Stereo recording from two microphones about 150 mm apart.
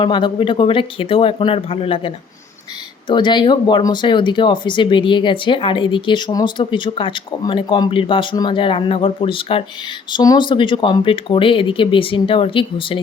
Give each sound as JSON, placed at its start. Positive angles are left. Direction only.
{"t": 0.0, "sound": "speech", "side_deg": 30}